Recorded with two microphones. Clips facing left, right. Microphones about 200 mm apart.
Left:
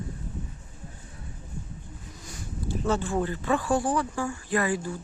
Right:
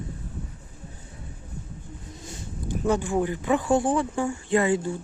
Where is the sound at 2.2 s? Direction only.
25° right (ahead or behind).